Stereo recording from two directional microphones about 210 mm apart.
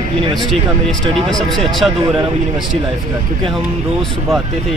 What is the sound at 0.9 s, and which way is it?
Speech, centre (ahead or behind).